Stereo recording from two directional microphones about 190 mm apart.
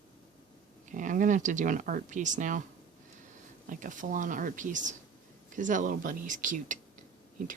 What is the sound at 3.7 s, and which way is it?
Speech, 45° right (ahead or behind).